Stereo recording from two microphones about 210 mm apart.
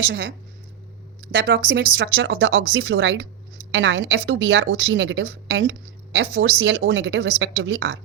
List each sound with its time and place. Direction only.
0.0 s speech: 60° right (ahead or behind)